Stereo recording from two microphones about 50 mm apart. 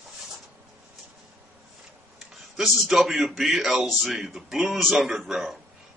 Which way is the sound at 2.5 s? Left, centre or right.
Centre.